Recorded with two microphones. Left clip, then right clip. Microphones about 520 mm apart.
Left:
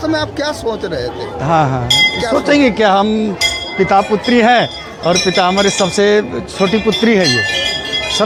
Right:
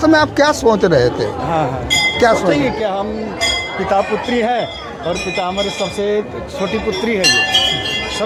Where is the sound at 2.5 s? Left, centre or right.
Left.